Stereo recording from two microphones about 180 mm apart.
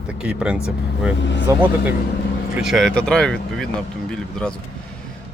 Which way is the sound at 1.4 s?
10° right (ahead or behind).